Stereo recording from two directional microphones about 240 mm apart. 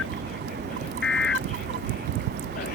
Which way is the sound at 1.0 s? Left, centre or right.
Centre.